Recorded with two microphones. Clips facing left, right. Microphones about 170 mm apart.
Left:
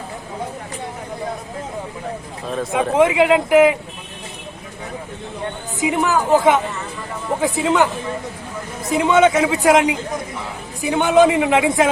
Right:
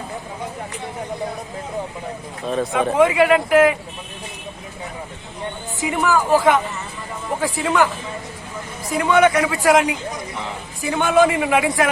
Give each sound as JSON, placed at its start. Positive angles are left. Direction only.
{"t": 2.9, "sound": "a man's voice", "side_deg": 20}
{"t": 5.8, "sound": "a man's voice", "side_deg": 20}
{"t": 8.9, "sound": "a man's voice", "side_deg": 20}